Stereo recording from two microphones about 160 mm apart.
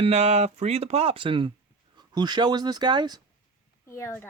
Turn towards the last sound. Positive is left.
turn(degrees=15)  # may be behind; listen again after turning